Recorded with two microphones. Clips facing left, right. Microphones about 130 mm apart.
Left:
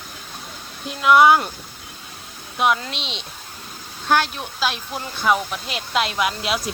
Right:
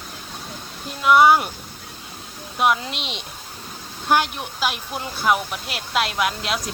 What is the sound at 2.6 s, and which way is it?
Speech, 5° right (ahead or behind).